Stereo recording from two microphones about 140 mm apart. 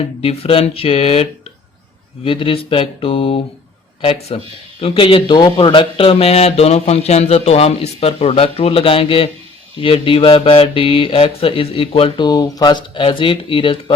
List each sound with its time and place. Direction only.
0.2 s speech: 45° left (ahead or behind)
2.2 s mantra: 40° left (ahead or behind)
4.8 s speech: 40° left (ahead or behind)
9.7 s mantra: 40° left (ahead or behind)